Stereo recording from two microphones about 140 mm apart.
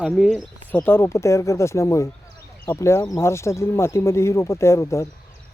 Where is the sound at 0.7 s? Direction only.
15° left (ahead or behind).